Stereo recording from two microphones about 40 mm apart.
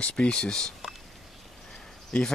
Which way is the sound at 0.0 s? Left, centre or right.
Left.